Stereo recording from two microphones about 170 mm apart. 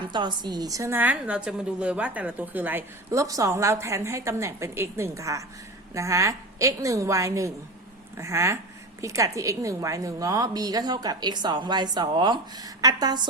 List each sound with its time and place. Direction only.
0.0 s a woman's voice: 25° right (ahead or behind)